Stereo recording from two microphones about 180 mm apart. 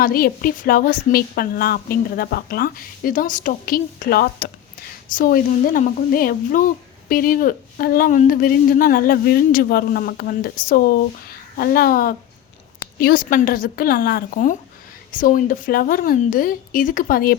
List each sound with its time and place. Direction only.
0.0 s speech: 55° left (ahead or behind)